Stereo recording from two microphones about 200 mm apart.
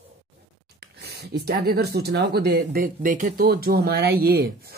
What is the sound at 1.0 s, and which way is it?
Speech, 55° right (ahead or behind).